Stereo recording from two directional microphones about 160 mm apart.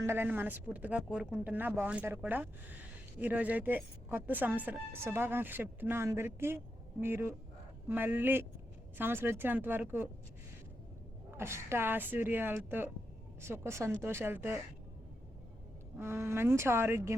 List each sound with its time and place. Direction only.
0.0 s speech: 15° right (ahead or behind)
11.3 s speech: 15° right (ahead or behind)
16.0 s speech: 15° right (ahead or behind)